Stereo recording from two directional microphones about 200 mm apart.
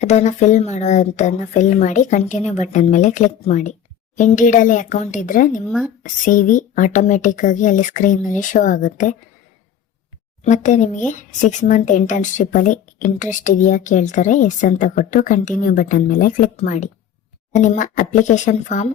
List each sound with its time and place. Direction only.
0.0 s speech: 35° left (ahead or behind)
5.6 s speech: centre (ahead or behind)
6.0 s speech: 40° left (ahead or behind)
10.4 s speech: 35° left (ahead or behind)